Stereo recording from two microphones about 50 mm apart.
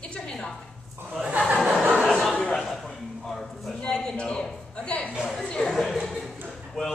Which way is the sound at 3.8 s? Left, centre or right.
Centre.